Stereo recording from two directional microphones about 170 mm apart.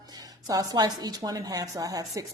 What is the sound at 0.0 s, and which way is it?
A woman's voice, 20° right (ahead or behind).